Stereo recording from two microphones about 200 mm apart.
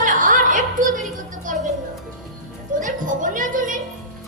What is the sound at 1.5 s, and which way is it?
Music, 40° right (ahead or behind).